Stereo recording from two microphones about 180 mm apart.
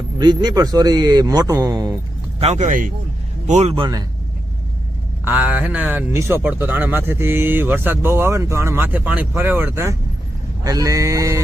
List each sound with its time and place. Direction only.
0.2 s speech: 20° right (ahead or behind)
2.4 s a man's voice: 40° right (ahead or behind)
5.2 s speech: 10° right (ahead or behind)